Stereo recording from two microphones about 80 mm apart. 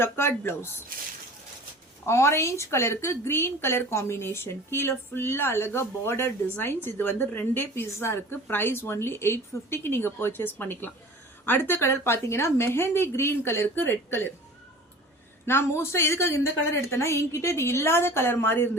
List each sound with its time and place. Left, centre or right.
0.0 s speech: left
2.0 s a woman's voice: left
15.4 s speech: left